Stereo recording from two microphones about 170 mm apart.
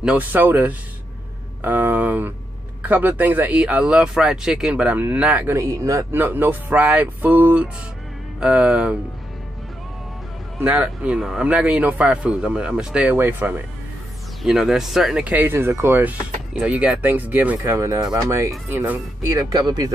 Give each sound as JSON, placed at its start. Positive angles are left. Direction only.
{"t": 0.0, "sound": "speech", "side_deg": -5}
{"t": 10.6, "sound": "speech", "side_deg": -10}